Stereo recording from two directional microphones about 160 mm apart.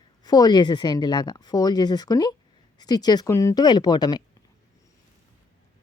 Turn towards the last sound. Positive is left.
turn(degrees=25)  # may be behind; listen again after turning